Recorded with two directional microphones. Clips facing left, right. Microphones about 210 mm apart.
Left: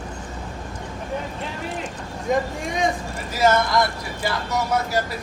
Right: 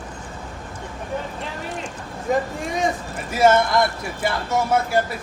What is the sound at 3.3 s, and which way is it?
Music, 25° right (ahead or behind).